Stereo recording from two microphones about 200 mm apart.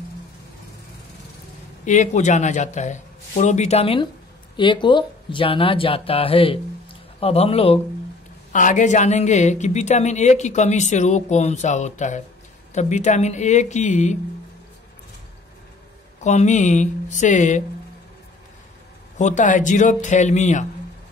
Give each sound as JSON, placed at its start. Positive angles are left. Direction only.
{"t": 1.9, "sound": "a woman's voice", "side_deg": 35}
{"t": 8.5, "sound": "a woman's voice", "side_deg": 40}
{"t": 16.2, "sound": "a woman's voice", "side_deg": 35}
{"t": 19.1, "sound": "a woman's voice", "side_deg": 40}